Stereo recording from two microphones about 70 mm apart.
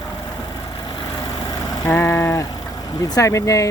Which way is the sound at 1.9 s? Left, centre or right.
Left.